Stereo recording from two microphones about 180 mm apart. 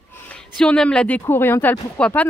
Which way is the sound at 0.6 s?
5° left (ahead or behind).